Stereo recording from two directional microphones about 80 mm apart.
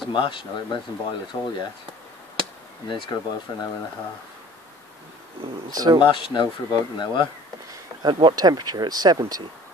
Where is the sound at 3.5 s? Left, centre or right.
Left.